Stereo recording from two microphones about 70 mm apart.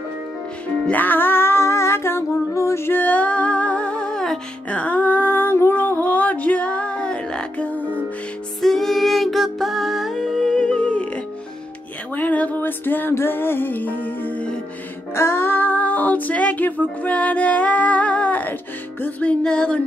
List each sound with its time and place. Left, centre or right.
0.9 s a sound: left; by 4.4 s centre
4.6 s music: left
8.5 s music: centre
12.2 s a sound: left
13.1 s music: left
15.1 s music: left; by 19.8 s centre